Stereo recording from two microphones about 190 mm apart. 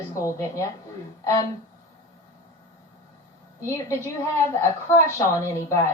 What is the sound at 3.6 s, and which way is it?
A woman's voice, 15° left (ahead or behind).